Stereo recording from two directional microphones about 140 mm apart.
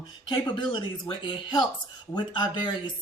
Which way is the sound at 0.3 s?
35° left (ahead or behind).